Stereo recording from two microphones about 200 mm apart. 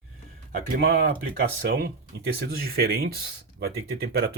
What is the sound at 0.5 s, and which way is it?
Speech, 45° right (ahead or behind).